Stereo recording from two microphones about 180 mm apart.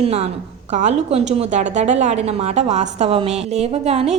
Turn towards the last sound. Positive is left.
turn(degrees=-35)  # may be behind; listen again after turning